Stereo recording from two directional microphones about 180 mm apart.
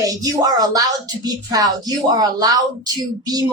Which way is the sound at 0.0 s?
20° right (ahead or behind).